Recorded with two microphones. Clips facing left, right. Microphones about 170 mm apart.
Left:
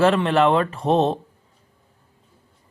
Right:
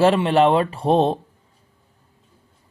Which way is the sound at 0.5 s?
25° right (ahead or behind).